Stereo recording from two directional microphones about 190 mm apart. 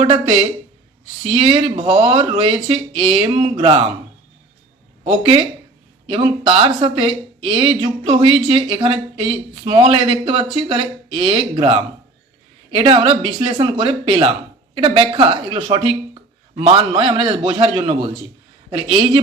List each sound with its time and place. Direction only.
0.0 s speech: 30° right (ahead or behind)
5.0 s speech: 30° right (ahead or behind)